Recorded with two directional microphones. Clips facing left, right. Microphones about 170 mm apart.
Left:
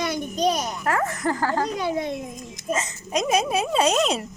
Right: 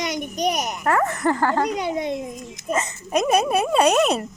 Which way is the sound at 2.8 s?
60° right (ahead or behind).